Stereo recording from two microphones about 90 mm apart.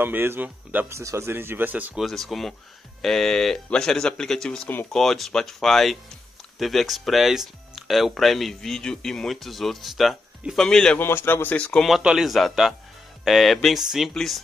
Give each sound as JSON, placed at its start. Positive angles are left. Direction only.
{"t": 0.0, "sound": "speech", "side_deg": -25}
{"t": 0.9, "sound": "speech", "side_deg": -30}
{"t": 2.0, "sound": "speech", "side_deg": 0}
{"t": 11.0, "sound": "a man's voice", "side_deg": 25}
{"t": 11.5, "sound": "speech", "side_deg": 15}
{"t": 12.0, "sound": "speech", "side_deg": -5}